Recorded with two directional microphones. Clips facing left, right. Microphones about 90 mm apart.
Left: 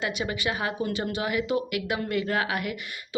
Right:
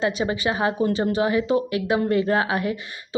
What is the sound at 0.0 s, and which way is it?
Speech, 30° right (ahead or behind).